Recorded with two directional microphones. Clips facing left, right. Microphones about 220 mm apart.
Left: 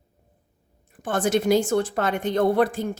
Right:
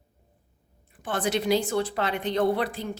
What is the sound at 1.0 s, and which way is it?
A woman's voice, 45° left (ahead or behind).